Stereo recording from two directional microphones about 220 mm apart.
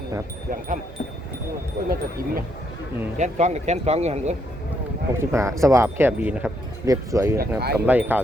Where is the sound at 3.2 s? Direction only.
30° right (ahead or behind).